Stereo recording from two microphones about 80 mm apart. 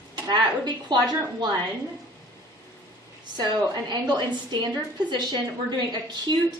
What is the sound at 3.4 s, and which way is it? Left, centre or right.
A woman's voice, right.